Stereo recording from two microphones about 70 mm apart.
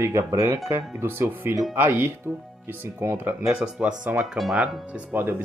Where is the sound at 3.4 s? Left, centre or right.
Centre.